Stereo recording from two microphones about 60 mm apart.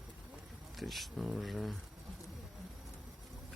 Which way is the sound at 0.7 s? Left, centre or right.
Centre.